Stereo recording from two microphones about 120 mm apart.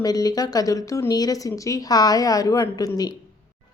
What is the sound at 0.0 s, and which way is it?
A woman's voice, 30° left (ahead or behind).